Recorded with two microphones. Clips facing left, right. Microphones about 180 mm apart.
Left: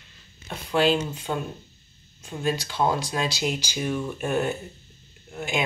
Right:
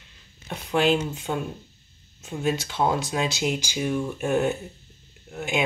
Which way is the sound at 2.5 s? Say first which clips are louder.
Even; 20° right (ahead or behind).